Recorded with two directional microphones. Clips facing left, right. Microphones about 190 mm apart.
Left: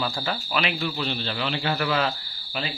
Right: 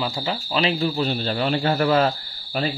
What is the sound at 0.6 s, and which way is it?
A man's voice, 40° right (ahead or behind).